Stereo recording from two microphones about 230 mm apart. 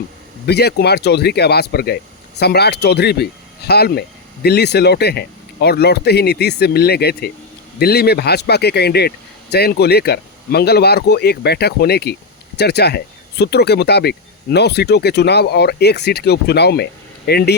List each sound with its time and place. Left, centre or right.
0.4 s speech: left